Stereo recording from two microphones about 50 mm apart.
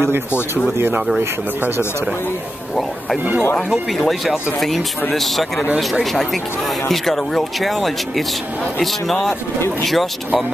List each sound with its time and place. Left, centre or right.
0.7 s speech: right
4.1 s speech: centre
6.9 s speech: centre
9.0 s speech: centre